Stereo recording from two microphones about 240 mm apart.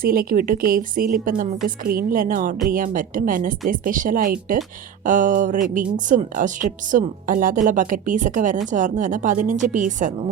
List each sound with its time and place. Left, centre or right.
0.0 s a woman's voice: right